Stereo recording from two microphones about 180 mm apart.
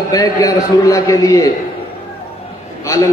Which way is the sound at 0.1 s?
20° left (ahead or behind).